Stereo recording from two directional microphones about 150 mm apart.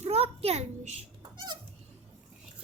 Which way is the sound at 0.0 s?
40° right (ahead or behind).